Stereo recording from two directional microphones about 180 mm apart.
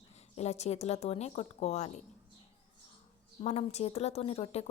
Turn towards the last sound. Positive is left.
turn(degrees=35)  # may be behind; listen again after turning